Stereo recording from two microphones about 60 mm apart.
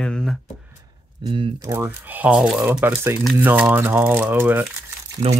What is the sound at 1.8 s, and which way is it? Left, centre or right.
Speech, right.